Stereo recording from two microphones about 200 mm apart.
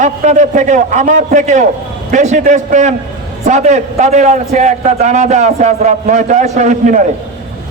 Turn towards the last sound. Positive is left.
turn(degrees=-35)  # may be behind; listen again after turning